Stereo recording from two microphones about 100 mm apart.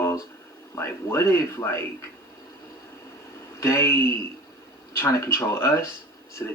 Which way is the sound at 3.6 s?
30° left (ahead or behind).